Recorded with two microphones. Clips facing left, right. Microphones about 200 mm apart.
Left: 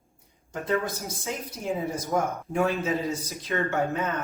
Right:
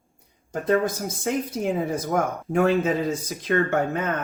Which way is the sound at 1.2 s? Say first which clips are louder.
Right 7 dB; 55° right (ahead or behind).